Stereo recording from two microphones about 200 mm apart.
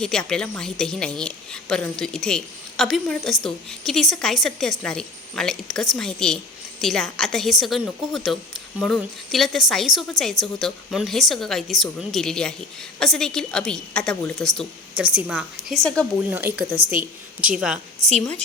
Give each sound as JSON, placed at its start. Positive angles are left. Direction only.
{"t": 0.0, "sound": "a woman's voice", "side_deg": 5}
{"t": 16.5, "sound": "speech", "side_deg": -50}
{"t": 16.9, "sound": "a woman's voice", "side_deg": -5}